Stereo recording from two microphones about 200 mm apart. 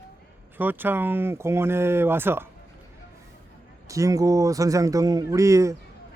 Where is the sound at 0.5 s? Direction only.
10° right (ahead or behind).